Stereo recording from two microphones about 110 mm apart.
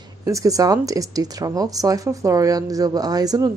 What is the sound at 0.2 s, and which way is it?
A woman's voice, 30° right (ahead or behind).